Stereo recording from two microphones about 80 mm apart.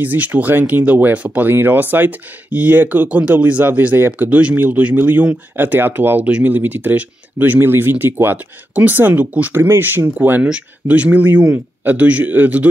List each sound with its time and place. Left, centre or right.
0.0 s speech: right